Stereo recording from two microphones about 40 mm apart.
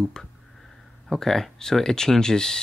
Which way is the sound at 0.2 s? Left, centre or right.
Centre.